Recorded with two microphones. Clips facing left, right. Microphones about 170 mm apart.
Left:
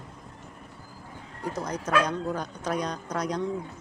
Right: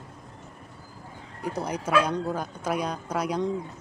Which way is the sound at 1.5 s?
10° right (ahead or behind).